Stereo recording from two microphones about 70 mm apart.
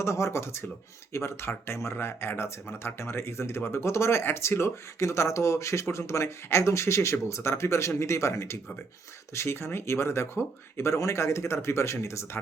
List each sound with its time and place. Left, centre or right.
0.0 s speech: left